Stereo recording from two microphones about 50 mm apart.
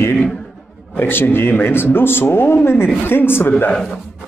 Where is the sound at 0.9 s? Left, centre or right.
Left.